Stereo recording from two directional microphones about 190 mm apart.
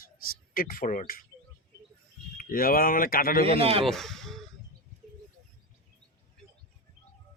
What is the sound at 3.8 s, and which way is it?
Speech, centre (ahead or behind).